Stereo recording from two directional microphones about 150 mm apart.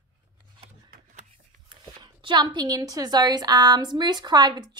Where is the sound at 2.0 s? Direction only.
30° right (ahead or behind).